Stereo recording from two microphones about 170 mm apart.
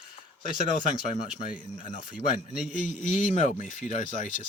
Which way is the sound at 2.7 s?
50° left (ahead or behind).